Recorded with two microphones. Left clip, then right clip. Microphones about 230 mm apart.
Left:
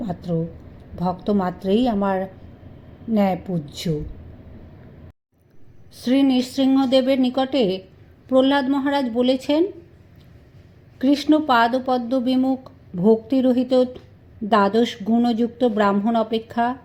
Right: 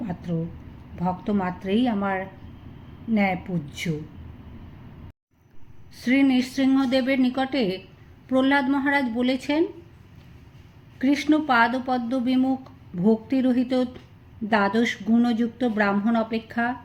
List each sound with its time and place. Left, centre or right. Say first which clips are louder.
0.0 s speech: left 5 dB; centre
5.9 s speech: left 2 dB; centre
10.9 s a woman's voice: left 4 dB; centre